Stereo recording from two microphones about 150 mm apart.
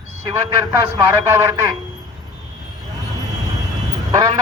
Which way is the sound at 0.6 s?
20° right (ahead or behind).